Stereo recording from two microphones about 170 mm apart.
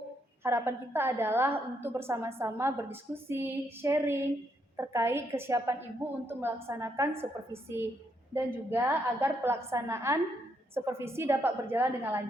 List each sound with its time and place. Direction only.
0.4 s a woman's voice: 15° right (ahead or behind)